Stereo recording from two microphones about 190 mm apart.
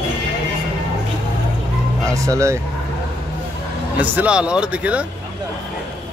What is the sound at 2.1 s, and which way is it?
Speech, 15° right (ahead or behind).